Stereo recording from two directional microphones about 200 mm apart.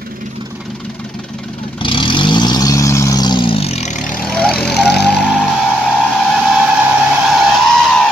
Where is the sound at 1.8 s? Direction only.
25° left (ahead or behind).